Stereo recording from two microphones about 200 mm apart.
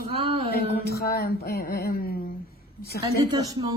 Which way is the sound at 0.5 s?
50° left (ahead or behind).